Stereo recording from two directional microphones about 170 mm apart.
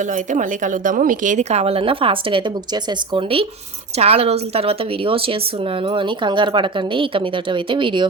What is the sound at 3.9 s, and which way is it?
A woman's voice, 35° right (ahead or behind).